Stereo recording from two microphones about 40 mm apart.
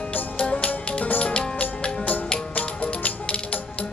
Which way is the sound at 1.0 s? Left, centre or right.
Left.